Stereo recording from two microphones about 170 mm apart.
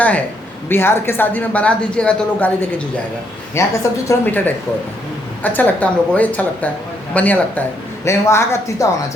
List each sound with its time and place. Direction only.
0.7 s speech: 15° left (ahead or behind)